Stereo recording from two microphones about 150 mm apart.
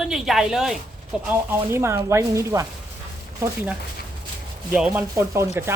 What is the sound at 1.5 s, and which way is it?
Speech, 15° right (ahead or behind).